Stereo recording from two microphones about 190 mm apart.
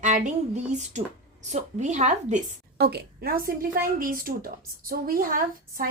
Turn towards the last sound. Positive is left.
turn(degrees=-50)  # may be behind; listen again after turning